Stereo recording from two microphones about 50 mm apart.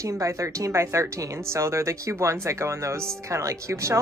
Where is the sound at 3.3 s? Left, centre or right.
Right.